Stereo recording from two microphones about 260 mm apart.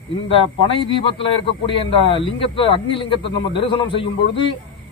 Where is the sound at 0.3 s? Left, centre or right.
Left.